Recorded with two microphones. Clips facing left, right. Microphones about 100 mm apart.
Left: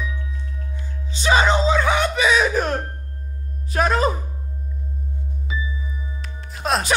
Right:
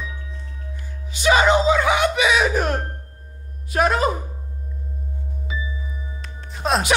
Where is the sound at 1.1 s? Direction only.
30° left (ahead or behind).